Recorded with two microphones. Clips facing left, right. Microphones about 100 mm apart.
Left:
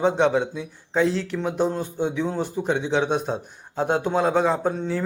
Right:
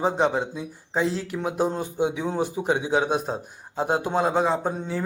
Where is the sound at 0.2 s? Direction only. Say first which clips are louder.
Left 3 dB; 5° right (ahead or behind).